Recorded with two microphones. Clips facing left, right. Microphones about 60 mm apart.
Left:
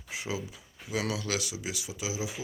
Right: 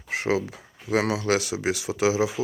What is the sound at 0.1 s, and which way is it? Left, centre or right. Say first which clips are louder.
Speech: right 11 dB; right.